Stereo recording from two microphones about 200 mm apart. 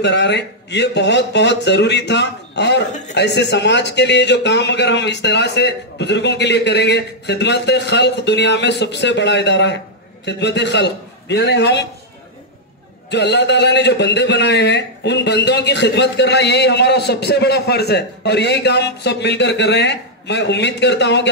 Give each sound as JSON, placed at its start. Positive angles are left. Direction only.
{"t": 0.0, "sound": "a man's voice", "side_deg": 60}
{"t": 13.1, "sound": "a man's voice", "side_deg": 60}